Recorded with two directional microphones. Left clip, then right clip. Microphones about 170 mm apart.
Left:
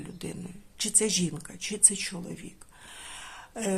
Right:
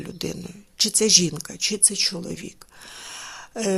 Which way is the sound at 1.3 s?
25° right (ahead or behind).